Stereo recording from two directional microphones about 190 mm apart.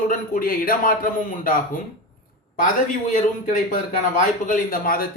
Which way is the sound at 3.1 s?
40° left (ahead or behind).